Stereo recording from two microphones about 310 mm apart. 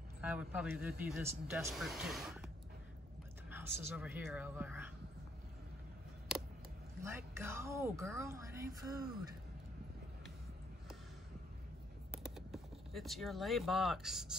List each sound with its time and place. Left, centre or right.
0.2 s speech: centre
7.0 s speech: centre
12.1 s a sound: centre